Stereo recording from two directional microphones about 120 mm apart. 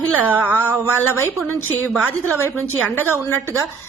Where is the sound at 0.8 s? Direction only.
20° left (ahead or behind).